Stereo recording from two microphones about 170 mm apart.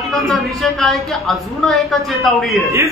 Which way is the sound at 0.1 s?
Centre (ahead or behind).